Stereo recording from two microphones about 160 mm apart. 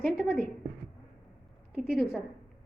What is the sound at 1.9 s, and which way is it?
Speech, centre (ahead or behind).